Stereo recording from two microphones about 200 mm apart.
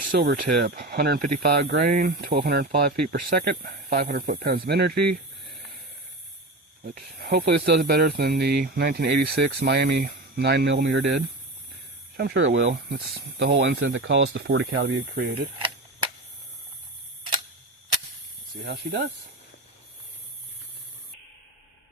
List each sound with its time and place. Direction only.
0.2 s speech: 50° right (ahead or behind)
7.2 s speech: 50° right (ahead or behind); by 14.9 s 75° right (ahead or behind)
15.1 s speech: 50° right (ahead or behind)
18.6 s speech: 55° right (ahead or behind)